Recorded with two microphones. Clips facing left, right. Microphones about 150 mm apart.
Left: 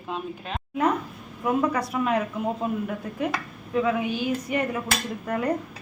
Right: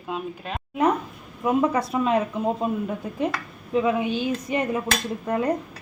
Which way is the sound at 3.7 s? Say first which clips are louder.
Right 2 dB; 20° right (ahead or behind).